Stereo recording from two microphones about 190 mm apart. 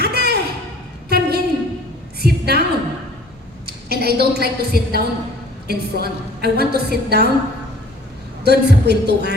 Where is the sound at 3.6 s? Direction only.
55° right (ahead or behind).